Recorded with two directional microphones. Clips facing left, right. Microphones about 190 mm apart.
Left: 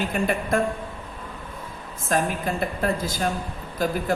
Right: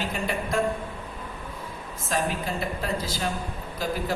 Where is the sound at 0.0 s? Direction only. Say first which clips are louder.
Left 4 dB; 55° left (ahead or behind).